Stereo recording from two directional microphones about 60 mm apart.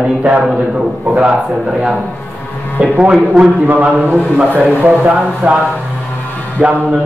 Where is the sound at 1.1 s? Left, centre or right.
Right.